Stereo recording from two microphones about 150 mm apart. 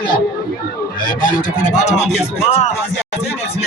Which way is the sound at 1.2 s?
55° left (ahead or behind).